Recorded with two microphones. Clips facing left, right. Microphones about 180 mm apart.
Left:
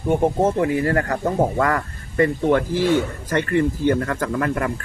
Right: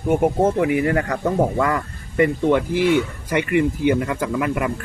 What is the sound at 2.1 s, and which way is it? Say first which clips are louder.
Speech: right 1 dB; 15° right (ahead or behind).